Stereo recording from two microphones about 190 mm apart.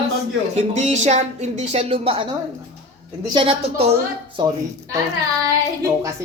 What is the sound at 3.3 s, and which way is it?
A woman's voice, 30° right (ahead or behind).